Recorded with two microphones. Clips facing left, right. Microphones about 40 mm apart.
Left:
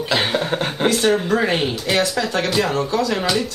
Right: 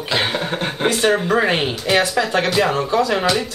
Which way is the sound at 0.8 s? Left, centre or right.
Centre.